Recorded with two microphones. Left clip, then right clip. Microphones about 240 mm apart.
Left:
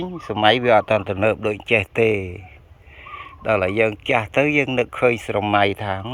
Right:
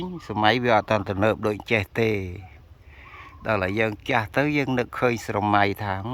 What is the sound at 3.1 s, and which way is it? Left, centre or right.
Sheep, centre.